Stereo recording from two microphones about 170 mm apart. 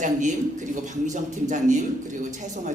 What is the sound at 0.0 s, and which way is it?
A woman's voice, 45° right (ahead or behind).